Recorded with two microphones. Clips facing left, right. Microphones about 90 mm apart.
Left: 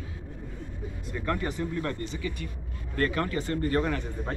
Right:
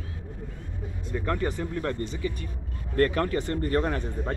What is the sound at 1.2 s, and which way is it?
Speech, 30° right (ahead or behind).